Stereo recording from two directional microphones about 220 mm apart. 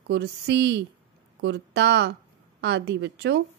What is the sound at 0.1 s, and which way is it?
A woman's voice, 50° right (ahead or behind).